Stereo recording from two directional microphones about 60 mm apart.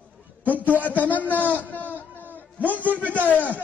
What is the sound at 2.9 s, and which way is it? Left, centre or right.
Speech, left.